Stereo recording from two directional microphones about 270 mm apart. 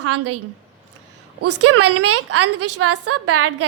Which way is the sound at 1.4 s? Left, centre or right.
Right.